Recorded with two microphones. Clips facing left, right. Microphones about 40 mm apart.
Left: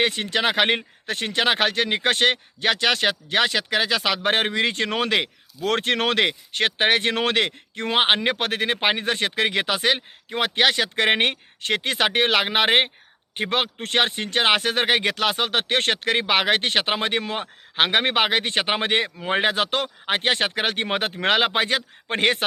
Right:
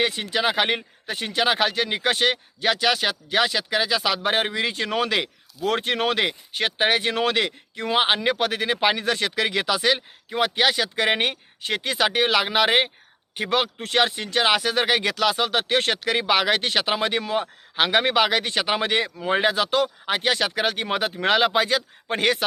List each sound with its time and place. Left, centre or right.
0.0 s speech: left